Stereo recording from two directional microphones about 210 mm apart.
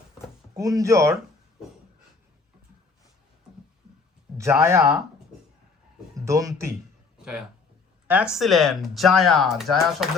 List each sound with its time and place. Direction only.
0.5 s speech: 15° right (ahead or behind)
4.4 s speech: 10° right (ahead or behind)
6.1 s speech: 15° right (ahead or behind)
8.0 s speech: 5° right (ahead or behind)